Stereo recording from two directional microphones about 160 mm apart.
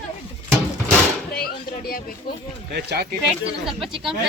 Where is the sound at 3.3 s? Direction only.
Centre (ahead or behind).